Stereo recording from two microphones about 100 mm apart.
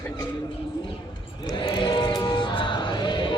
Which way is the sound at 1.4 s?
55° left (ahead or behind).